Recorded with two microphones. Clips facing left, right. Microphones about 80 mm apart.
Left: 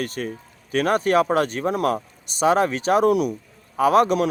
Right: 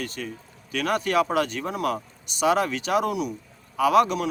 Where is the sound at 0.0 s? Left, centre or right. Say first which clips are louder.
Left 5 dB; left.